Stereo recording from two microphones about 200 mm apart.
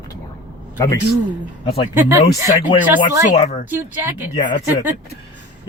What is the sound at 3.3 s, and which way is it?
Speech, 35° left (ahead or behind).